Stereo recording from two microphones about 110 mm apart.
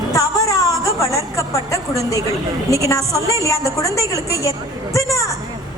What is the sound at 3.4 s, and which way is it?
Speech, 30° left (ahead or behind).